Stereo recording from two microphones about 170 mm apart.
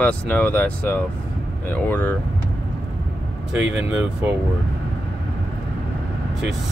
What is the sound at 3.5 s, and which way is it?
Speech, 5° right (ahead or behind).